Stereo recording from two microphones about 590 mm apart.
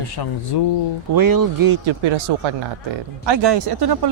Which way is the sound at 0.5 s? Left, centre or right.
Left.